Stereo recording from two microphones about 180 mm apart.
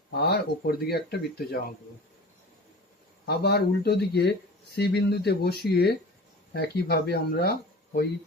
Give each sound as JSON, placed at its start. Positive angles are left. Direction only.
{"t": 0.1, "sound": "speech", "side_deg": 65}
{"t": 3.2, "sound": "speech", "side_deg": 65}